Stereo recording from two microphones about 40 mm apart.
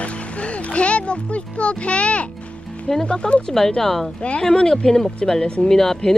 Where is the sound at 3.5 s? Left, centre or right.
Centre.